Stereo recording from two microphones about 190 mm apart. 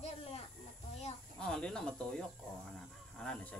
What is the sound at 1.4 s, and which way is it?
Cricket, 5° left (ahead or behind).